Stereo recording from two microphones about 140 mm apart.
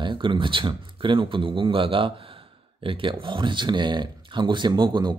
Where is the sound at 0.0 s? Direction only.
35° right (ahead or behind).